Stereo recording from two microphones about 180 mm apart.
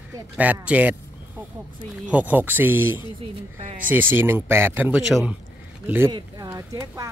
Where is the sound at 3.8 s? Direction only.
10° right (ahead or behind).